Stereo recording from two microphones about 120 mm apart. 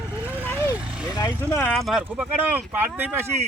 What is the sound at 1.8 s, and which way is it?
Speech, centre (ahead or behind).